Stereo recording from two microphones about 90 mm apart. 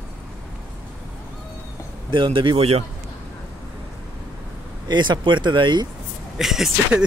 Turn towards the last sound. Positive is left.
turn(degrees=-5)  # may be behind; listen again after turning